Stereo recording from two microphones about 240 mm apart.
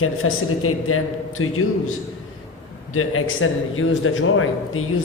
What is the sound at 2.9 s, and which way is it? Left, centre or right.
A man's voice, left.